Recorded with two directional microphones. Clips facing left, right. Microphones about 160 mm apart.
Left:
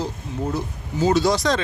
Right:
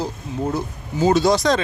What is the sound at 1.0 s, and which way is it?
Speech, 20° right (ahead or behind).